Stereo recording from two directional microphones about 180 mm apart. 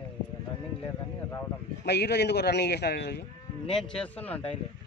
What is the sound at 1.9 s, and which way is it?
A man's voice, 65° left (ahead or behind).